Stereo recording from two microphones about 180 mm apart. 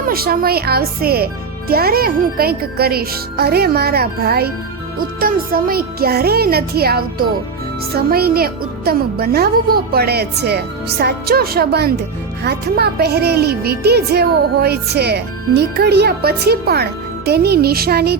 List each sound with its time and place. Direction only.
0.1 s a woman's voice: 55° right (ahead or behind)